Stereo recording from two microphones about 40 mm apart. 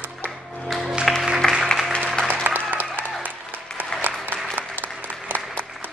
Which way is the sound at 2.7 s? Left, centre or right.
Right.